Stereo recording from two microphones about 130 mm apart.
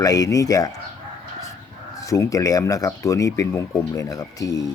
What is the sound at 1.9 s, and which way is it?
Speech, 25° left (ahead or behind).